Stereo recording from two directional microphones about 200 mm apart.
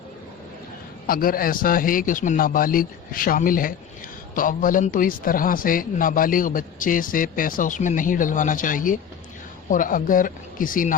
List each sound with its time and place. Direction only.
1.0 s a man's voice: 45° left (ahead or behind)